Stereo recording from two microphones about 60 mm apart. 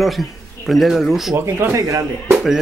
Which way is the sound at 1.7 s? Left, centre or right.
Right.